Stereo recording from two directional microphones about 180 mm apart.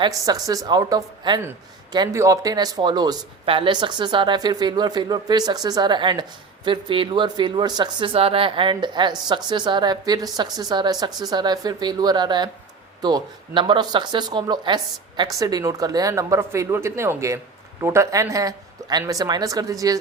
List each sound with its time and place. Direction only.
0.0 s speech: 20° right (ahead or behind)